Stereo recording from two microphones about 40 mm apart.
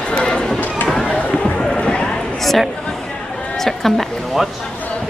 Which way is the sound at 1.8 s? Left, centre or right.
Left.